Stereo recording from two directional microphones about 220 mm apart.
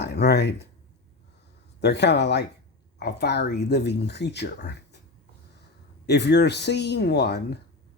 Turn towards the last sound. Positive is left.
turn(degrees=50)  # may be behind; listen again after turning